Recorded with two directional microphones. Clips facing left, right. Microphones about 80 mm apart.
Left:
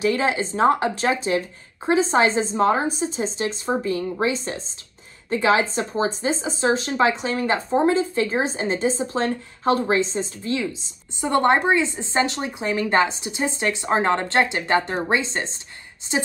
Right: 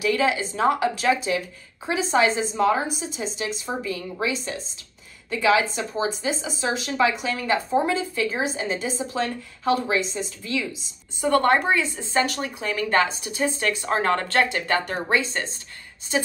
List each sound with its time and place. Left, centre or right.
0.0 s a woman's voice: left